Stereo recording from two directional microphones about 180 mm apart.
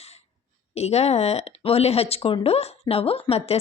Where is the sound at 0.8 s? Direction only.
35° left (ahead or behind).